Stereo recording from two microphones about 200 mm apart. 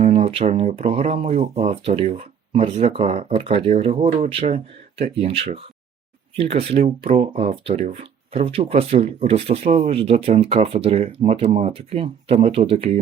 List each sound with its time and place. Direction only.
0.0 s speech: 30° right (ahead or behind)